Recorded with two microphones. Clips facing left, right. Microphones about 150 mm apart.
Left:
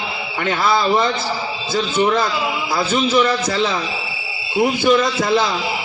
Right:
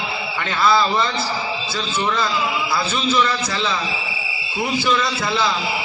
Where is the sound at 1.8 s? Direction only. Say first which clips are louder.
Left 6 dB; 45° left (ahead or behind).